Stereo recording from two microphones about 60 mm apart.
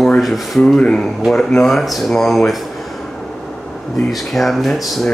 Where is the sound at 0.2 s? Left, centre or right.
Centre.